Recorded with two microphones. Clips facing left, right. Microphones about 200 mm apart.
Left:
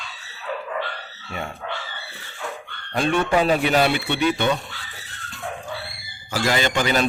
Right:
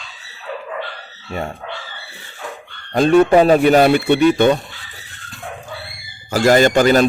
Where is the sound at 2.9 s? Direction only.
40° right (ahead or behind).